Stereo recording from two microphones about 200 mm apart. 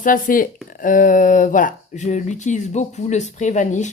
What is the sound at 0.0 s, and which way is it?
Speech, 45° left (ahead or behind).